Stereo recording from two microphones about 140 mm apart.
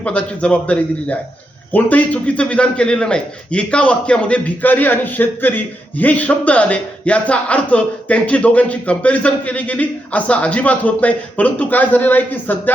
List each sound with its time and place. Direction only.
0.0 s a man's voice: 10° left (ahead or behind)